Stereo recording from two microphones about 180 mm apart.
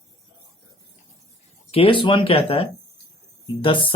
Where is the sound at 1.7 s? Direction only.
30° left (ahead or behind).